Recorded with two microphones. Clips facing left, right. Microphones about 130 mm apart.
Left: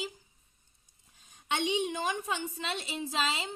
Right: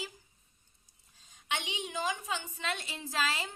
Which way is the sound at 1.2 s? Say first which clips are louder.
Left 5 dB; 55° left (ahead or behind).